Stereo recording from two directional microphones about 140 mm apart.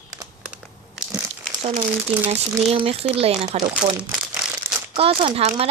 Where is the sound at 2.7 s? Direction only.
45° right (ahead or behind).